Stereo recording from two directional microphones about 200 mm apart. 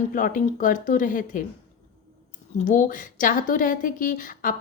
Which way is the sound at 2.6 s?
40° left (ahead or behind).